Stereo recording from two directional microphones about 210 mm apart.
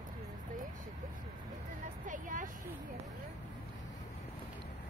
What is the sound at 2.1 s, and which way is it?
Vehicle, 40° right (ahead or behind).